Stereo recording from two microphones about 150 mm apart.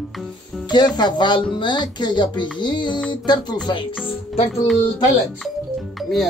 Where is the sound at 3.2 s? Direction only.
30° left (ahead or behind).